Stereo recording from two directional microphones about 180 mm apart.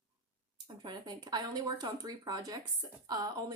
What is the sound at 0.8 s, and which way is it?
Speech, 25° right (ahead or behind).